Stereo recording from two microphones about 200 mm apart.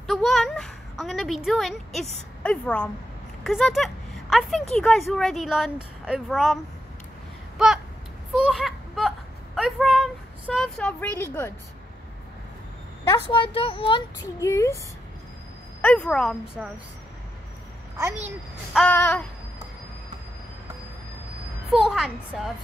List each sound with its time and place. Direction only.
0.0 s speech: centre (ahead or behind)
7.5 s a sound: centre (ahead or behind)
13.1 s speech: 25° left (ahead or behind)
15.8 s speech: 5° left (ahead or behind)
18.7 s speech: 5° left (ahead or behind)
21.7 s speech: centre (ahead or behind)